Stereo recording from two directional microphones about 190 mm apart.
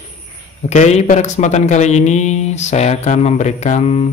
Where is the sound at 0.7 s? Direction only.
35° left (ahead or behind).